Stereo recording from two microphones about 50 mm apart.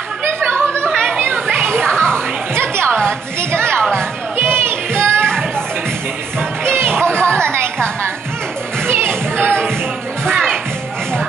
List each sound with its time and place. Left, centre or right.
0.5 s a sound: left
1.2 s children playing: right
1.7 s music: centre
2.5 s a sound: right
4.4 s music: right
6.6 s music: right
7.1 s music: centre
7.4 s music: right
8.8 s music: right